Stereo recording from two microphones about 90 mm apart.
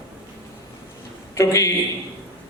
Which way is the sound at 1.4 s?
35° left (ahead or behind).